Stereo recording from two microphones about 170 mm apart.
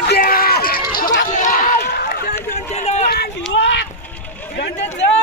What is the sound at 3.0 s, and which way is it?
Run, 65° left (ahead or behind).